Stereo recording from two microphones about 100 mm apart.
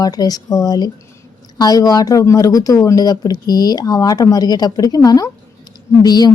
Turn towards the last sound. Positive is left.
turn(degrees=40)  # may be behind; listen again after turning